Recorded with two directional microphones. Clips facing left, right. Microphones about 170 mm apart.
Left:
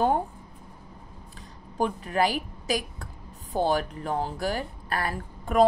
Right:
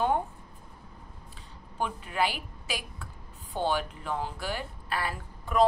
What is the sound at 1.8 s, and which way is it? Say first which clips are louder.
A woman's voice: left 5 dB; 40° left (ahead or behind).